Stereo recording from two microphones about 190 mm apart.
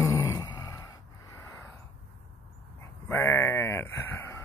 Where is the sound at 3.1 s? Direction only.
10° left (ahead or behind).